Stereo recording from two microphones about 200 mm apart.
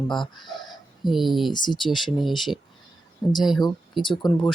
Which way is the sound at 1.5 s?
20° left (ahead or behind).